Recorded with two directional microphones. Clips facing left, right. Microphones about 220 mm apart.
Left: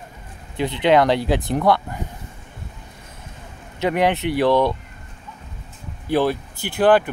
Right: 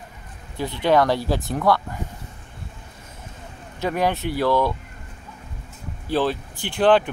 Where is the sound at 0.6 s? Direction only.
20° left (ahead or behind).